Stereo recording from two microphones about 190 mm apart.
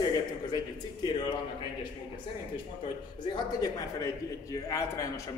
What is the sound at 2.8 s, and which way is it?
A man's voice, 20° left (ahead or behind).